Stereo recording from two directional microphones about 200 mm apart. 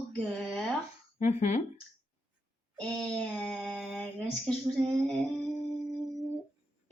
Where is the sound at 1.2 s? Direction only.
35° left (ahead or behind).